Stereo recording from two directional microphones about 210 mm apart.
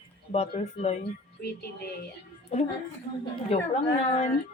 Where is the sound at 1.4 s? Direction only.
50° left (ahead or behind).